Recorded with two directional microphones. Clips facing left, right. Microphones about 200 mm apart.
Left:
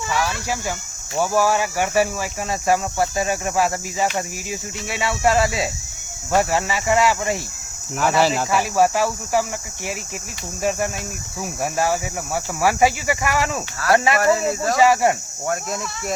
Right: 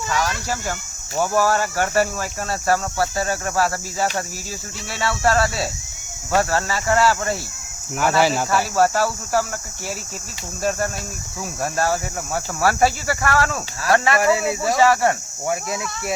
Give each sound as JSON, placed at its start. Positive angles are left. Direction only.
{"t": 0.1, "sound": "speech", "side_deg": 5}
{"t": 7.9, "sound": "speech", "side_deg": 0}
{"t": 8.7, "sound": "speech", "side_deg": 10}
{"t": 14.2, "sound": "speech", "side_deg": -10}
{"t": 14.8, "sound": "speech", "side_deg": 20}
{"t": 15.4, "sound": "speech", "side_deg": -5}